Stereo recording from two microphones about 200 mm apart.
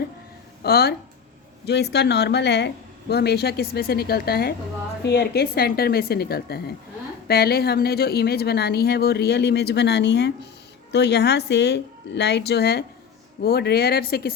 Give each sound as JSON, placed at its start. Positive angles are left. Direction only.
{"t": 0.6, "sound": "speech", "side_deg": 50}